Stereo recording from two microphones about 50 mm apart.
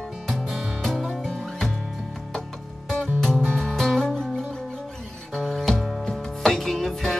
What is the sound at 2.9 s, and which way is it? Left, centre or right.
Music, centre.